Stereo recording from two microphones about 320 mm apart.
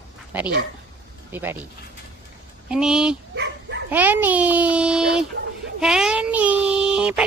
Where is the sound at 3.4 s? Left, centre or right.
Right.